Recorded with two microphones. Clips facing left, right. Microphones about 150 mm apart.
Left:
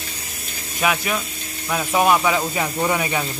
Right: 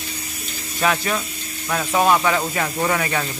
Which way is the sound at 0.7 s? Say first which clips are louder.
Right 1 dB; 5° left (ahead or behind).